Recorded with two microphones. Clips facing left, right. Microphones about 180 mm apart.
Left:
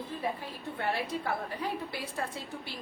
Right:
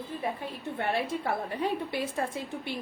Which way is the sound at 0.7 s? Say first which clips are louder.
Right 3 dB; 25° right (ahead or behind).